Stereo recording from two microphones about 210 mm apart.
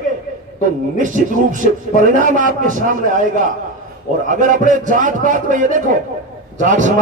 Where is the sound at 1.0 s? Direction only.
40° right (ahead or behind).